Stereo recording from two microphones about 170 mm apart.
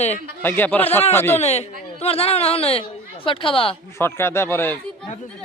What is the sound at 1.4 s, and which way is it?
A woman's voice, 40° left (ahead or behind).